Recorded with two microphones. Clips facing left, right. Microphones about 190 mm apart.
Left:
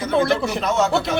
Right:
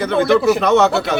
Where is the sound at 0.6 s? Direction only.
70° right (ahead or behind).